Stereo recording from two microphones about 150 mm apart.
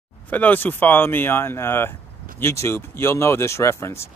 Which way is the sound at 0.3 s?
10° left (ahead or behind).